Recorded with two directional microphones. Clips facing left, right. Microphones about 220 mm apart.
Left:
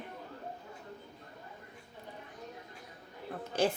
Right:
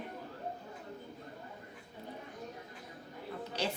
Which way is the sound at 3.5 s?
50° left (ahead or behind).